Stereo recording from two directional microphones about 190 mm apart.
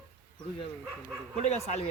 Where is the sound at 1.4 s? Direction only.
35° left (ahead or behind).